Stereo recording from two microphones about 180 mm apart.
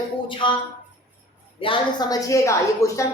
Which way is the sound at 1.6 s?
25° left (ahead or behind).